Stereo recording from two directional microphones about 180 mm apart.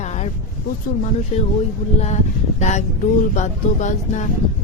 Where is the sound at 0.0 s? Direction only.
40° left (ahead or behind).